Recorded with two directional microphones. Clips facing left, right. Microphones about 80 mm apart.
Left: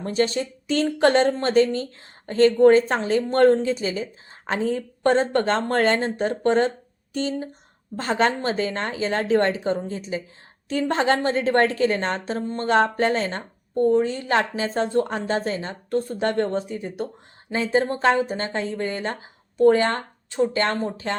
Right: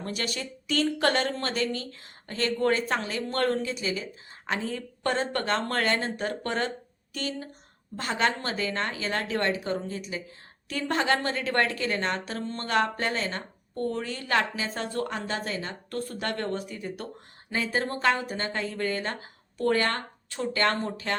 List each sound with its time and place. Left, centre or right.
0.0 s speech: left
13.7 s speech: left